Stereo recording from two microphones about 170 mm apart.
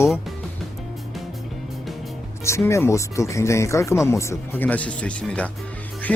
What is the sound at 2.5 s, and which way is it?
Speech, 15° left (ahead or behind).